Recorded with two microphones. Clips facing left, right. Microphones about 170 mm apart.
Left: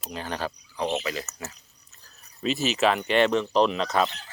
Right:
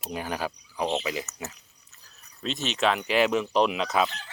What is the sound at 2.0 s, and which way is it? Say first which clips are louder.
Speech: left 5 dB; 5° left (ahead or behind).